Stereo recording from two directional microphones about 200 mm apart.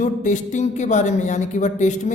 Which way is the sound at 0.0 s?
40° left (ahead or behind).